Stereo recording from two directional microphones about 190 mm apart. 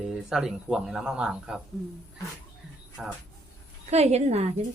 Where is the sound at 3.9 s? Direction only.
35° right (ahead or behind).